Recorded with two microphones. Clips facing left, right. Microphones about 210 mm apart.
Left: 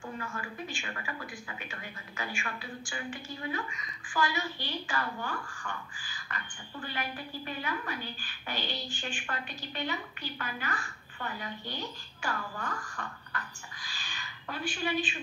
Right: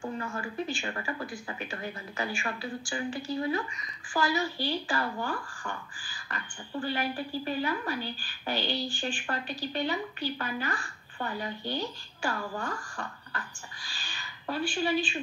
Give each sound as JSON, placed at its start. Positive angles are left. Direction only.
{"t": 0.0, "sound": "a woman's voice", "side_deg": -40}